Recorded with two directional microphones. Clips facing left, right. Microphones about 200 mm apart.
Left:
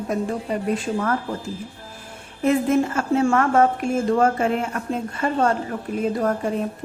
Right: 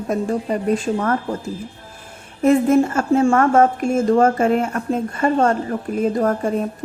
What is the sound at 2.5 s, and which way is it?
Speech, 45° right (ahead or behind).